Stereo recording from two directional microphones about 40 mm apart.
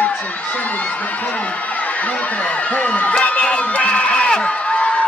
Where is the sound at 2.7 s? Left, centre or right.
Left.